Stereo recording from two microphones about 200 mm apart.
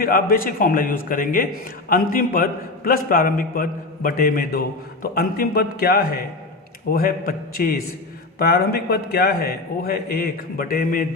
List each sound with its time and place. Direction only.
0.0 s a man's voice: 45° left (ahead or behind)